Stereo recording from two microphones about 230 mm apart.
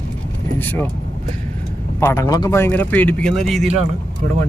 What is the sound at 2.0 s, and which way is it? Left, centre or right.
Speech, centre.